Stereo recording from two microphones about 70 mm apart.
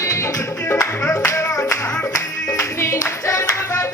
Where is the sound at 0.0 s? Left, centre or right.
Left.